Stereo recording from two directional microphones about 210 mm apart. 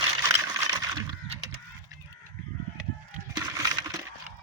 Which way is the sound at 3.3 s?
20° right (ahead or behind).